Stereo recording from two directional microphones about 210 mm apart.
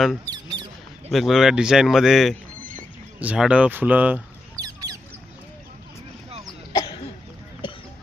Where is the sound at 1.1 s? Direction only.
Centre (ahead or behind).